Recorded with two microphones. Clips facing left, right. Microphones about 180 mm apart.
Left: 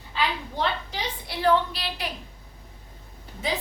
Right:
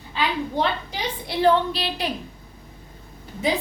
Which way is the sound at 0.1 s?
15° right (ahead or behind).